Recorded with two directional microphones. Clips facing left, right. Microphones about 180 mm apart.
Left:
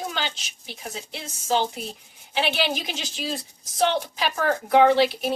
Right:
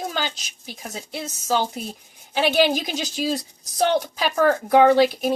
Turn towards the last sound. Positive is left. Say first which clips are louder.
# right 3 dB
turn(degrees=-45)  # may be behind; listen again after turning